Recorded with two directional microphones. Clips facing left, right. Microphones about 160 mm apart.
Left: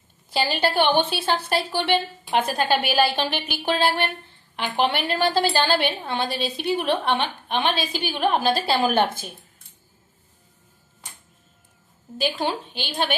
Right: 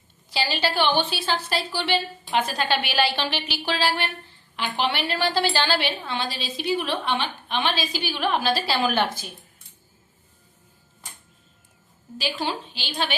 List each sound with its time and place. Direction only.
0.3 s a woman's voice: 50° left (ahead or behind)
12.1 s a woman's voice: 50° left (ahead or behind)